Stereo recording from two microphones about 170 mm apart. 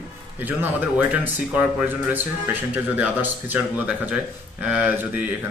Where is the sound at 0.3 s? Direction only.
10° right (ahead or behind).